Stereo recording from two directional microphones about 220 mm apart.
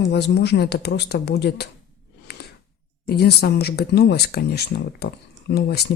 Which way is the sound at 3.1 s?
45° left (ahead or behind).